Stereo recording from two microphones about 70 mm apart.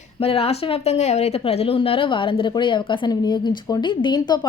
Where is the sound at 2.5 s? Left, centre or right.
Left.